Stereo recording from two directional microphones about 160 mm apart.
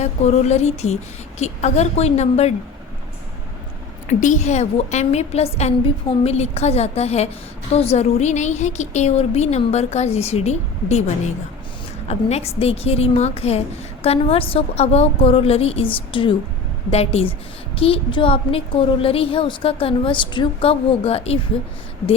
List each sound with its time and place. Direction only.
0.0 s a woman's voice: 45° left (ahead or behind)
4.2 s a woman's voice: 50° left (ahead or behind)